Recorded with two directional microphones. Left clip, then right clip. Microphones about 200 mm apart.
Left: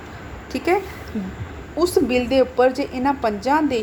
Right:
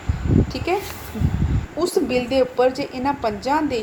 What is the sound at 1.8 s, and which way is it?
A woman's voice, 25° left (ahead or behind).